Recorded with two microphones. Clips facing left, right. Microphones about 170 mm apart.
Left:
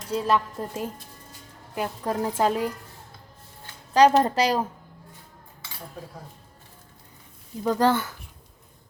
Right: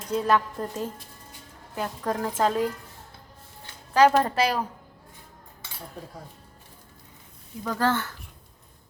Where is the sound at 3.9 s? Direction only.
20° left (ahead or behind).